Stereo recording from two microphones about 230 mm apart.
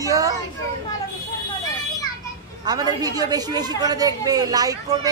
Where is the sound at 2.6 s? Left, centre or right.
Centre.